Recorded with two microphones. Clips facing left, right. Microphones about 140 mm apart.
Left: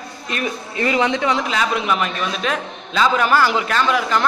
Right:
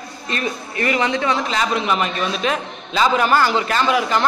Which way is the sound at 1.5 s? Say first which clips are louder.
Even; centre (ahead or behind).